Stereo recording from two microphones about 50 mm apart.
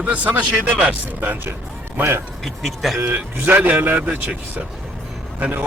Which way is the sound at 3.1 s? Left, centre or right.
Right.